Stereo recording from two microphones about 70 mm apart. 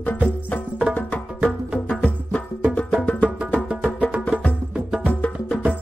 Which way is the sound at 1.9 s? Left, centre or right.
Centre.